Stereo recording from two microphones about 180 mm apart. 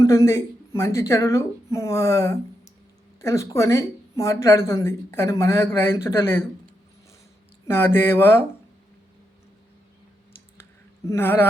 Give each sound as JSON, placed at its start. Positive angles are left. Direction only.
{"t": 0.0, "sound": "speech", "side_deg": 15}
{"t": 7.7, "sound": "speech", "side_deg": 15}
{"t": 11.0, "sound": "speech", "side_deg": 15}